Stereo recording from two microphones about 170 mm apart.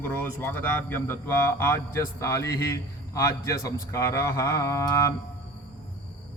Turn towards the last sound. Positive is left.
turn(degrees=20)  # may be behind; listen again after turning